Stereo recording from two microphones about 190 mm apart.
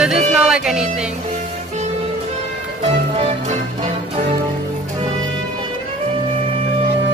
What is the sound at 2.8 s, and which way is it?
Music, 35° right (ahead or behind).